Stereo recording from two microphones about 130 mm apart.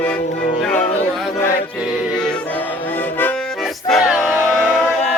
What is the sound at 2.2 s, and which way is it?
Music, 5° left (ahead or behind).